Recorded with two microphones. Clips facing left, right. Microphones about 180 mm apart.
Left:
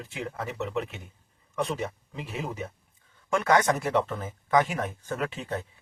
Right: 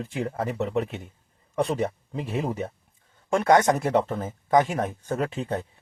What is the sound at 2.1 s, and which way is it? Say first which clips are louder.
Speech: right 7 dB; 35° right (ahead or behind).